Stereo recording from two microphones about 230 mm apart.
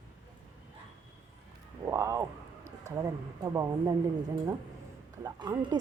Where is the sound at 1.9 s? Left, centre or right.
Centre.